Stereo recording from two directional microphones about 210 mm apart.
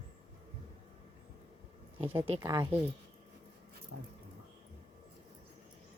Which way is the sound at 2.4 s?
15° right (ahead or behind).